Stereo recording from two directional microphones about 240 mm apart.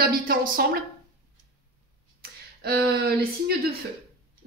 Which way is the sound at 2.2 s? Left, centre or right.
Right.